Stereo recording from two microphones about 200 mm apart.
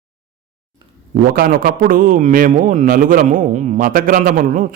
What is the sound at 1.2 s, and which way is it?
A man's voice, 45° right (ahead or behind).